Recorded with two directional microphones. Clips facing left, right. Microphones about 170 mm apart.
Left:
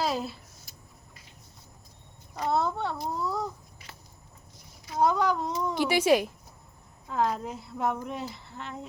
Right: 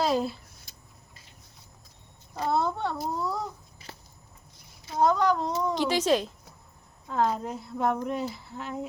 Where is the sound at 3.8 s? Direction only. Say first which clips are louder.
Right 5 dB; 30° right (ahead or behind).